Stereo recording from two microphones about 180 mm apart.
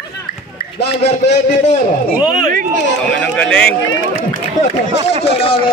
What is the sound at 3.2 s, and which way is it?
Speech, 5° left (ahead or behind).